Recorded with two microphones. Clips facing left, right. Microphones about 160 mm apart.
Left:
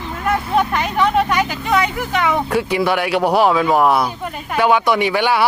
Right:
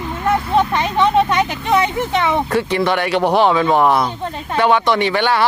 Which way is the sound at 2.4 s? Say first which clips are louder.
Even; 5° left (ahead or behind).